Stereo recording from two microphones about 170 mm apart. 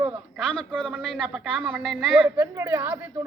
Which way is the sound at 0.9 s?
5° right (ahead or behind).